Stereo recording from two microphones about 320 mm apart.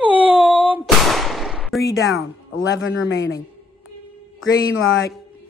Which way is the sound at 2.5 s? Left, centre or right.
Left.